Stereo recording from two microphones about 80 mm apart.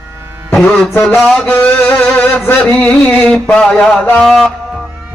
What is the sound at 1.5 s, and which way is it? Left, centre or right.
Music, left.